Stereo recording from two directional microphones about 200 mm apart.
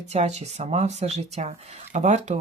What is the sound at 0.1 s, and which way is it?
Speech, 30° right (ahead or behind).